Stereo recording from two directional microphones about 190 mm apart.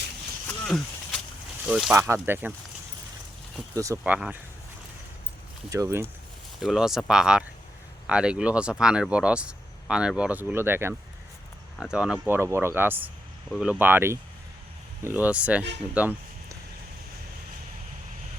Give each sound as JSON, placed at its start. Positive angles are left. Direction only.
{"t": 0.6, "sound": "a sound", "side_deg": 5}
{"t": 1.6, "sound": "speech", "side_deg": -5}
{"t": 2.0, "sound": "speech", "side_deg": -15}
{"t": 3.8, "sound": "speech", "side_deg": -15}
{"t": 5.7, "sound": "speech", "side_deg": -15}
{"t": 6.6, "sound": "speech", "side_deg": 0}
{"t": 16.0, "sound": "toot", "side_deg": -10}